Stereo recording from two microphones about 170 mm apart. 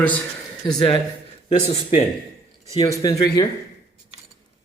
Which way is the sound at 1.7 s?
35° left (ahead or behind).